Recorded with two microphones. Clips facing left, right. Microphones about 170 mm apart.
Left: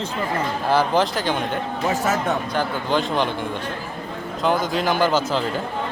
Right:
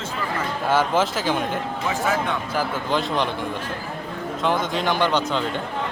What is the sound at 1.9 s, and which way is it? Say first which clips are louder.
Speech: left 1 dB; 45° left (ahead or behind).